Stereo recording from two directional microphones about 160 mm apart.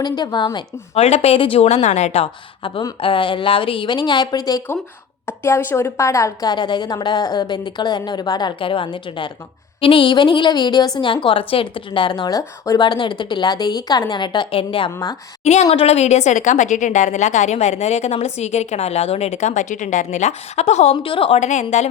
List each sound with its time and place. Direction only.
0.0 s speech: 25° left (ahead or behind); by 2.2 s 45° left (ahead or behind)
2.2 s a woman's voice: 30° left (ahead or behind)
15.4 s a woman's voice: 45° left (ahead or behind)